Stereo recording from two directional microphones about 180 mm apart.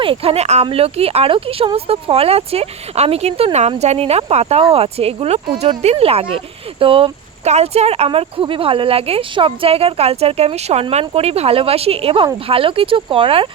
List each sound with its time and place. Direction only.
0.0 s speech: 30° right (ahead or behind)